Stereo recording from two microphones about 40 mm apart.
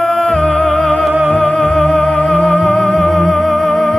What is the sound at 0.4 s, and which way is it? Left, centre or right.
Music, left.